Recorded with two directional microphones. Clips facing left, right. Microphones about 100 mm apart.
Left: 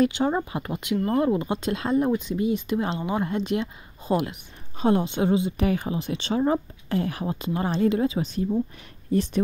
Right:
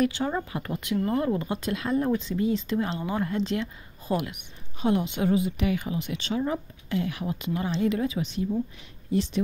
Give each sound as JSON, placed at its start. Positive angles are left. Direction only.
{"t": 0.0, "sound": "speech", "side_deg": 25}
{"t": 5.6, "sound": "a woman's voice", "side_deg": 40}